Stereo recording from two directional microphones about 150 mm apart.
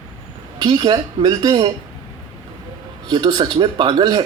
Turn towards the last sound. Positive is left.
turn(degrees=-30)  # may be behind; listen again after turning